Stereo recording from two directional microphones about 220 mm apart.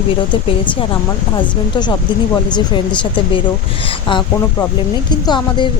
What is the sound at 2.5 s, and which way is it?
A woman's voice, 20° left (ahead or behind).